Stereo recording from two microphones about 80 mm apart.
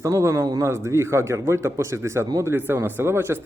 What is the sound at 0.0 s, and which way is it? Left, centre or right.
Speech, right.